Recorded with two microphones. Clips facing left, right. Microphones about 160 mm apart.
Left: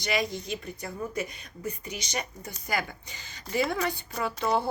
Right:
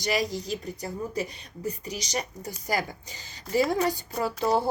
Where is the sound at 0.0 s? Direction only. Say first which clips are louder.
Right 2 dB; 40° right (ahead or behind).